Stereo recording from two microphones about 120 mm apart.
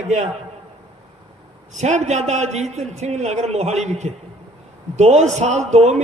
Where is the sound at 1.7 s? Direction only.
75° right (ahead or behind).